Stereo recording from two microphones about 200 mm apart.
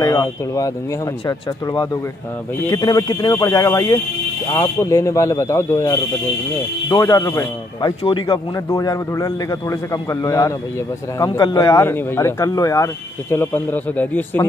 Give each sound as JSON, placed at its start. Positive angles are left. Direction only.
{"t": 0.0, "sound": "speech", "side_deg": 15}